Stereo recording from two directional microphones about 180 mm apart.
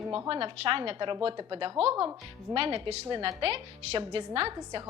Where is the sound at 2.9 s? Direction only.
30° right (ahead or behind).